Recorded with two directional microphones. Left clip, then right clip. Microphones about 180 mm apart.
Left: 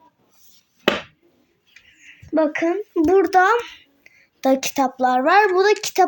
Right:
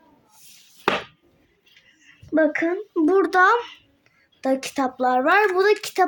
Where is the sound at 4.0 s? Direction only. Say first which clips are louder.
Left 6 dB; 20° left (ahead or behind).